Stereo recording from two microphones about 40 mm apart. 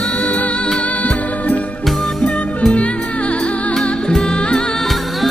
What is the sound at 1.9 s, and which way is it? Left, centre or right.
Music, centre.